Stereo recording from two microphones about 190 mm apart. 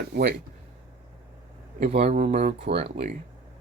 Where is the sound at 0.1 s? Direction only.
55° right (ahead or behind).